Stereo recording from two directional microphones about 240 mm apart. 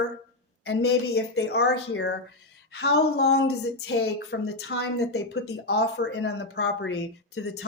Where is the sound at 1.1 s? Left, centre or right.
Left.